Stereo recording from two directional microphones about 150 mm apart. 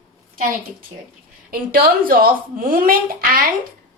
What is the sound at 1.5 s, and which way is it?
Speech, 75° right (ahead or behind).